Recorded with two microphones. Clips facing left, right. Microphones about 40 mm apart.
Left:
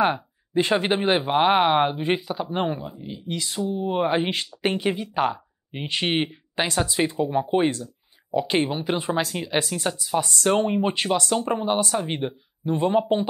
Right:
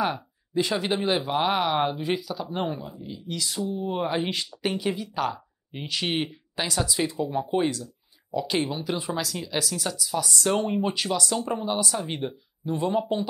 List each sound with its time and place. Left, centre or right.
0.0 s speech: left